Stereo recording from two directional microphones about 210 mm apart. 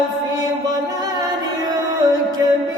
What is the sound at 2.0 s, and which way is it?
Music, 20° right (ahead or behind).